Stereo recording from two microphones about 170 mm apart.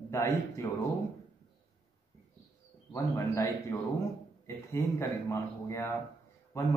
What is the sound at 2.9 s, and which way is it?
Speech, 15° left (ahead or behind).